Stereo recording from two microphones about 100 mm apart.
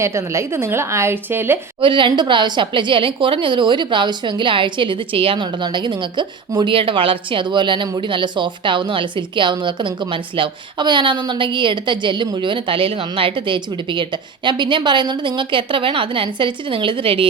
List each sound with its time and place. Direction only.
0.0 s speech: 30° right (ahead or behind)
1.8 s a woman's voice: 55° right (ahead or behind)
6.7 s a woman's voice: 60° right (ahead or behind)